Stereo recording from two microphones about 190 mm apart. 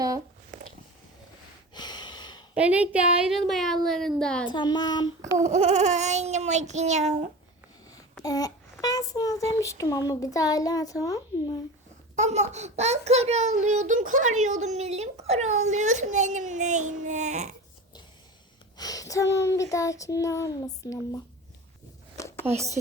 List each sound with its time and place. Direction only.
1.7 s a sound: 20° left (ahead or behind)
2.6 s a woman's voice: 5° right (ahead or behind)
4.4 s a child's voice: 25° left (ahead or behind)
5.5 s a child's voice: 35° right (ahead or behind)
8.2 s a child's voice: 20° left (ahead or behind)
12.1 s a child's voice: 35° right (ahead or behind)
18.8 s speech: 20° left (ahead or behind)